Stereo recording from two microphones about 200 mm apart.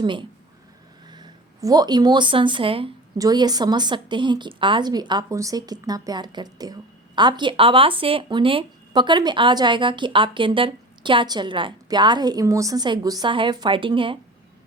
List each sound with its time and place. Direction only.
0.0 s a woman's voice: 25° right (ahead or behind)